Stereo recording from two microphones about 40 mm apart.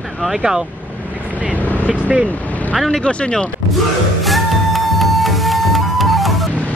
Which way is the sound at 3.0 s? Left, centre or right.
Left.